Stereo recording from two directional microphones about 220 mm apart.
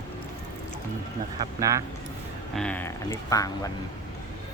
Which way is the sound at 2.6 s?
5° left (ahead or behind).